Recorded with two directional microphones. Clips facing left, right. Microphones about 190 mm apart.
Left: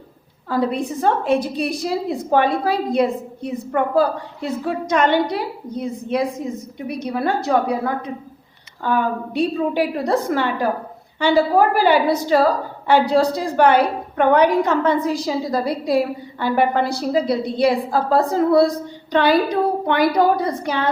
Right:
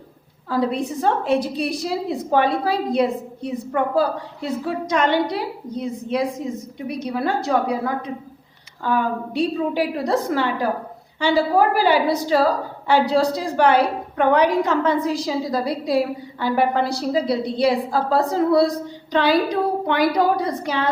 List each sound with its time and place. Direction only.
0.5 s a woman's voice: 50° left (ahead or behind)